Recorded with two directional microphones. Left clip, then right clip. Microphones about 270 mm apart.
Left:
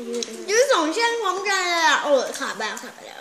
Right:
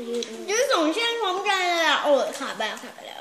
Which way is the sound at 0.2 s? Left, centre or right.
Left.